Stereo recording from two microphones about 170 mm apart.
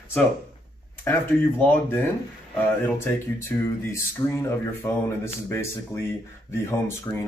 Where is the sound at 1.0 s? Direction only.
10° left (ahead or behind).